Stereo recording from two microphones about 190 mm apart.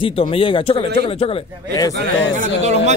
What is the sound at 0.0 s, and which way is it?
A man's voice, 30° left (ahead or behind).